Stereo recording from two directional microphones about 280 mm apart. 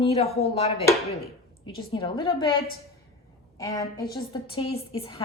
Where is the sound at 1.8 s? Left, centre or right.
Centre.